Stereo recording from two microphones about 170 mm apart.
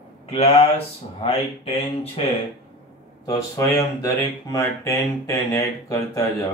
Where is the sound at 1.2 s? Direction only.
35° left (ahead or behind).